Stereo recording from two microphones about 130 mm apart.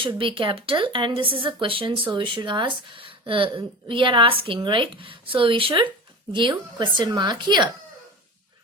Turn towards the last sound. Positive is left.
turn(degrees=-35)  # may be behind; listen again after turning